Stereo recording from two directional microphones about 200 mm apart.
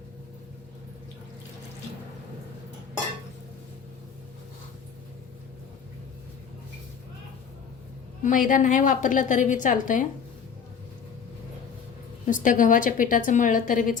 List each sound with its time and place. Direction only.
8.2 s a woman's voice: 40° left (ahead or behind)
12.2 s a woman's voice: 40° left (ahead or behind)